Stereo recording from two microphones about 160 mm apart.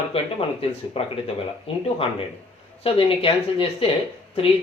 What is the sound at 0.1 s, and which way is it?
Speech, 35° left (ahead or behind).